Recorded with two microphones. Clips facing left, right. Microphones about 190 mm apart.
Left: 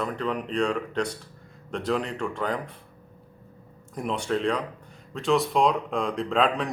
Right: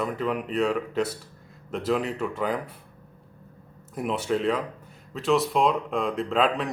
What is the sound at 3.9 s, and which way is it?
Speech, 5° right (ahead or behind).